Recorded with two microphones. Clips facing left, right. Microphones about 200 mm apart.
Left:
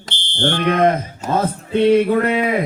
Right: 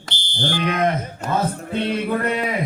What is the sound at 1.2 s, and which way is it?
Music, 55° right (ahead or behind).